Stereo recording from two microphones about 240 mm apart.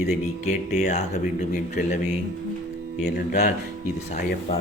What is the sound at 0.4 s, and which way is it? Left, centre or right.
A man's voice, left.